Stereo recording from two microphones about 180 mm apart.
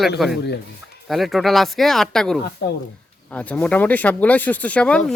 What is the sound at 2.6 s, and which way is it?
Speech, 65° left (ahead or behind).